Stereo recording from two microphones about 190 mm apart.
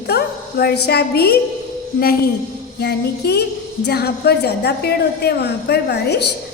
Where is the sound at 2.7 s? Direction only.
60° left (ahead or behind).